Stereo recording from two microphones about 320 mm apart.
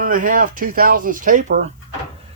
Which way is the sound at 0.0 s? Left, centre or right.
Right.